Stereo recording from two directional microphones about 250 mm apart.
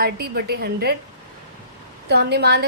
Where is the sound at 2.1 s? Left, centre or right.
Right.